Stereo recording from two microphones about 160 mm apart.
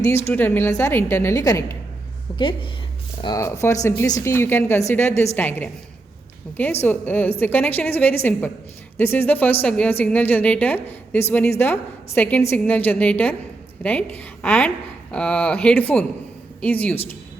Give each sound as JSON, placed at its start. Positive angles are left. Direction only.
{"t": 0.3, "sound": "a woman's voice", "side_deg": 10}
{"t": 2.3, "sound": "a woman's voice", "side_deg": 35}
{"t": 6.8, "sound": "a woman's voice", "side_deg": 10}